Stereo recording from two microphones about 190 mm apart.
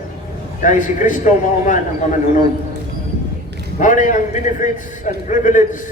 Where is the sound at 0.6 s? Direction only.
40° left (ahead or behind).